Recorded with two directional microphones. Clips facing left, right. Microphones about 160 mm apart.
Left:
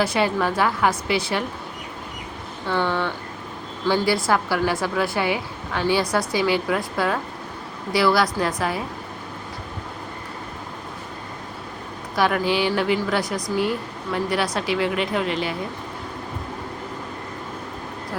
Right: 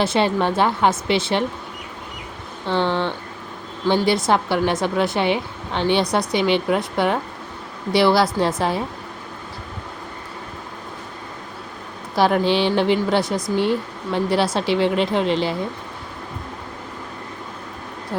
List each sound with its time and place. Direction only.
0.0 s a woman's voice: 25° right (ahead or behind)
2.6 s a woman's voice: 20° right (ahead or behind)
12.1 s a woman's voice: 30° right (ahead or behind)